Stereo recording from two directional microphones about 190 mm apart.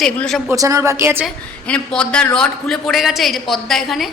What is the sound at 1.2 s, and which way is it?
A woman's voice, 5° left (ahead or behind).